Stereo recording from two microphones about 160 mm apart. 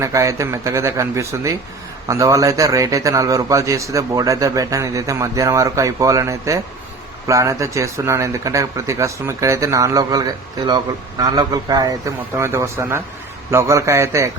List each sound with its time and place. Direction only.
0.0 s a man's voice: 20° right (ahead or behind)
11.3 s a man's voice: 25° right (ahead or behind)